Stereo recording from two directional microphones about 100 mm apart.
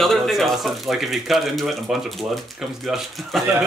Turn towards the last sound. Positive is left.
turn(degrees=0)  # may be behind; listen again after turning